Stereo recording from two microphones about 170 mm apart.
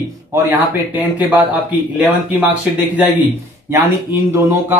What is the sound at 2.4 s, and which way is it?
Speech, 10° right (ahead or behind).